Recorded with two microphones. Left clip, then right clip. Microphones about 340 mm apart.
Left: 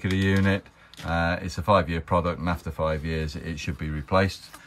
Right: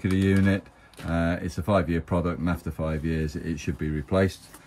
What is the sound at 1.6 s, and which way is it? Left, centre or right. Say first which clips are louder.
Speech: left 3 dB; centre.